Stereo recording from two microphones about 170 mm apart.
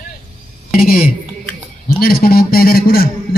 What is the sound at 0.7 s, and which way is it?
A man's voice, 60° left (ahead or behind).